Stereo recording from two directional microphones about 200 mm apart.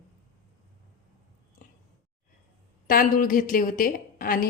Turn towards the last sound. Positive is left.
turn(degrees=45)  # may be behind; listen again after turning